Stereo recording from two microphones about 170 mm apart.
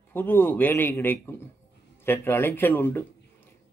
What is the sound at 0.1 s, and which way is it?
A man's voice, 10° left (ahead or behind).